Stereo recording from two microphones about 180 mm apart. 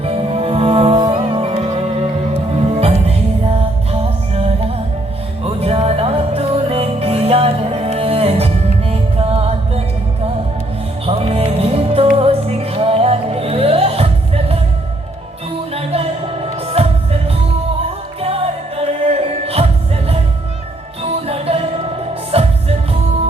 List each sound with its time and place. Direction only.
0.0 s music: 30° right (ahead or behind)
3.1 s music: 35° right (ahead or behind)
11.0 s music: 30° right (ahead or behind)
15.7 s music: 35° right (ahead or behind)
21.2 s music: 35° right (ahead or behind)